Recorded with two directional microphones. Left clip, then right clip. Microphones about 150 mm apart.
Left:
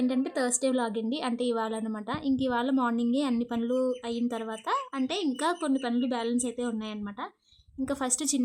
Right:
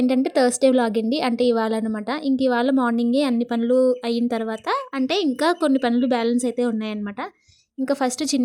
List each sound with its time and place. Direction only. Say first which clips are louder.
0.1 s a woman's voice: right 10 dB; 40° right (ahead or behind)
7.9 s a woman's voice: right 9 dB; 30° right (ahead or behind)